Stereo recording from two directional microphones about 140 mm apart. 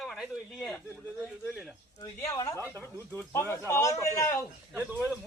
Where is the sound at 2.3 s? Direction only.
25° left (ahead or behind).